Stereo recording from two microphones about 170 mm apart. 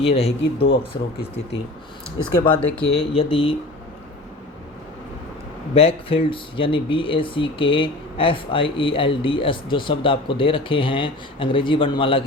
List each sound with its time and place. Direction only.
0.0 s speech: 35° left (ahead or behind)
2.1 s speech: 30° left (ahead or behind)
5.7 s speech: 35° left (ahead or behind)